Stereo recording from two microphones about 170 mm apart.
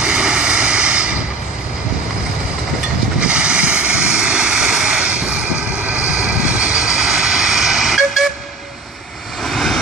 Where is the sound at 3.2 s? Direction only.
5° right (ahead or behind).